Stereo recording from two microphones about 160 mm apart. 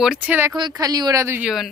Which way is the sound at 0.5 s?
25° right (ahead or behind).